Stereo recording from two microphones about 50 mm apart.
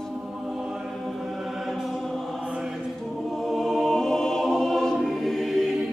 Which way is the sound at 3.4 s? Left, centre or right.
Centre.